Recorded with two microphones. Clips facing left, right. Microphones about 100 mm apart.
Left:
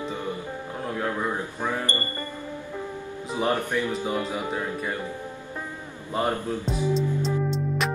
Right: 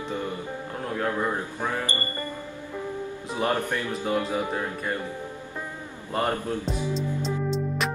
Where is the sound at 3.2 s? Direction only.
10° left (ahead or behind).